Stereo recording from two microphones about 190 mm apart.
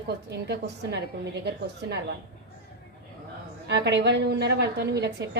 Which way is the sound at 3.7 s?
65° right (ahead or behind).